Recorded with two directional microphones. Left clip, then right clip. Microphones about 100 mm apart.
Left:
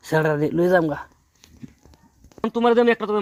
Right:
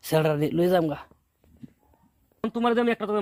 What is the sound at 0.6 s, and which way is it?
Speech, 25° right (ahead or behind).